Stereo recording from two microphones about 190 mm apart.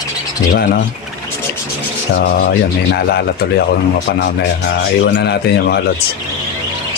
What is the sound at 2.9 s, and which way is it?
Speech, 60° left (ahead or behind).